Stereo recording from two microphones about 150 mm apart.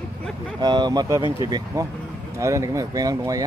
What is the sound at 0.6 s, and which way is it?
Speech, 30° right (ahead or behind).